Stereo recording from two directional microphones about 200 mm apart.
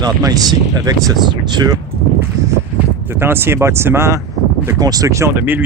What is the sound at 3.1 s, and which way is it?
Speech, 10° right (ahead or behind).